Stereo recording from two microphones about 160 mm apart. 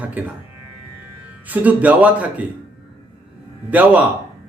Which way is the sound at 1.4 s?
10° right (ahead or behind).